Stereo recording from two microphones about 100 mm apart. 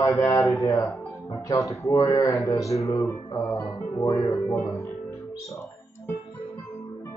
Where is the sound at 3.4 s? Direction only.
15° left (ahead or behind).